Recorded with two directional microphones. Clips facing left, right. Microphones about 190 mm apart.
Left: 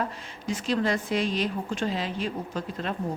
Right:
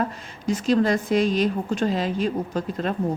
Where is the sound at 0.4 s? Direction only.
40° right (ahead or behind).